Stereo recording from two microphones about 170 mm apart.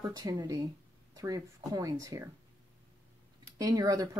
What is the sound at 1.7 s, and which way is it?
Speech, 20° right (ahead or behind).